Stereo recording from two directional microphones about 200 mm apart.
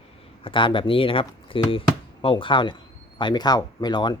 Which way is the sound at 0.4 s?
25° left (ahead or behind).